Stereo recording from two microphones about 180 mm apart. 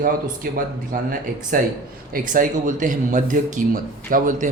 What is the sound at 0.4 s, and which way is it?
Speech, 50° right (ahead or behind).